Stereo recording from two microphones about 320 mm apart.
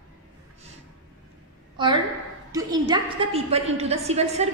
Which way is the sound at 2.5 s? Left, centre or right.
Centre.